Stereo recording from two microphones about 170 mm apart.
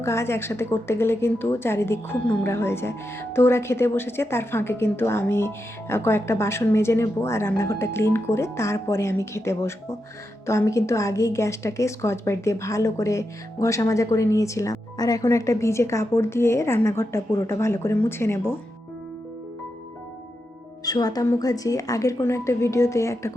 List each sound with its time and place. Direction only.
0.0 s speech: 15° left (ahead or behind)
20.8 s a woman's voice: 20° left (ahead or behind)